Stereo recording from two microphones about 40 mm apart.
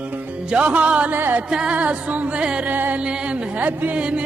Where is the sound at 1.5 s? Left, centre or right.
Right.